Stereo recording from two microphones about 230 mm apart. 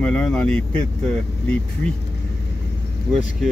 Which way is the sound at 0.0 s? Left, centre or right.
Centre.